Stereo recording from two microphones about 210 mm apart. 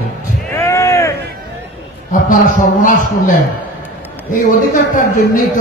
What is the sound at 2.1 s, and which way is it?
Speech, 40° left (ahead or behind).